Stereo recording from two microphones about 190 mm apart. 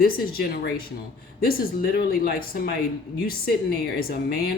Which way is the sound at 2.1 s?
50° left (ahead or behind).